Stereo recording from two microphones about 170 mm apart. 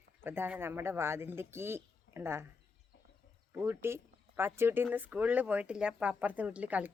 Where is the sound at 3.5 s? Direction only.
15° right (ahead or behind).